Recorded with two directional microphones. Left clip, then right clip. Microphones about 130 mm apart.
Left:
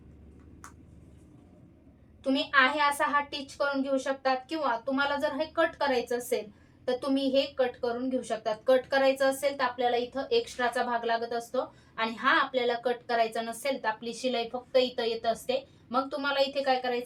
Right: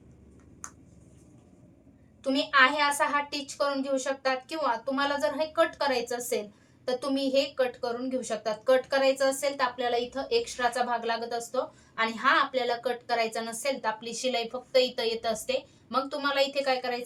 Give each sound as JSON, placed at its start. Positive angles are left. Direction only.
{"t": 2.2, "sound": "a woman's voice", "side_deg": 15}